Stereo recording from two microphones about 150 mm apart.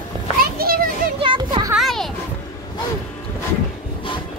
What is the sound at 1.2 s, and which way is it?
Children playing, 35° right (ahead or behind).